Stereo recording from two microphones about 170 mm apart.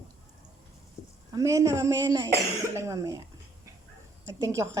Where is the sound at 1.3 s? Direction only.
20° right (ahead or behind).